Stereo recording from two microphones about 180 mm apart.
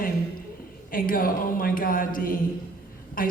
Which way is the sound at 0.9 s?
50° left (ahead or behind).